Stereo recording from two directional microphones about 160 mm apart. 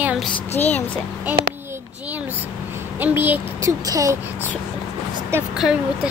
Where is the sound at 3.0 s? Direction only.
10° right (ahead or behind).